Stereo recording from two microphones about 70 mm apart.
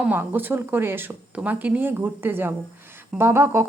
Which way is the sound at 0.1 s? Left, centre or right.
Right.